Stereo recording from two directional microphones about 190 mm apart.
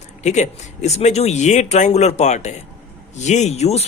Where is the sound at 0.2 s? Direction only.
35° left (ahead or behind).